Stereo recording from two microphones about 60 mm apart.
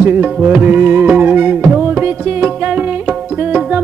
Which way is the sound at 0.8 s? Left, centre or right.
Right.